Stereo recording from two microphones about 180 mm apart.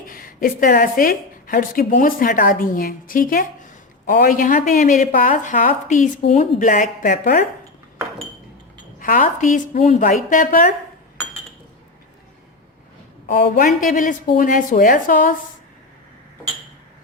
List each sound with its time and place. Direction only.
0.0 s a woman's voice: 50° left (ahead or behind)
9.0 s a woman's voice: 50° left (ahead or behind)
13.2 s a woman's voice: 50° left (ahead or behind)